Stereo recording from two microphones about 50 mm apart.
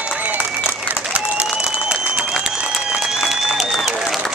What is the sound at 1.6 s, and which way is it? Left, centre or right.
Applause, centre.